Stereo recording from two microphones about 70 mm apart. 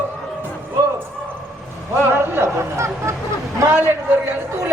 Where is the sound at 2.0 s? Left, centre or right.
Right.